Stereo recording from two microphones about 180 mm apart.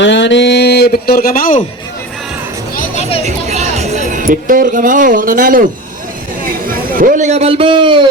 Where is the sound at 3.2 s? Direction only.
40° right (ahead or behind).